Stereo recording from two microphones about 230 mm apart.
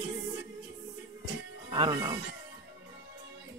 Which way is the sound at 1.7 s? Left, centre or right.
Centre.